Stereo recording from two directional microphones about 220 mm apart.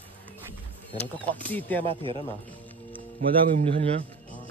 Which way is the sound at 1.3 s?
10° left (ahead or behind).